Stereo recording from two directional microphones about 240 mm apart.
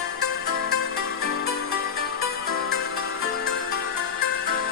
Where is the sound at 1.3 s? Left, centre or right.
Left.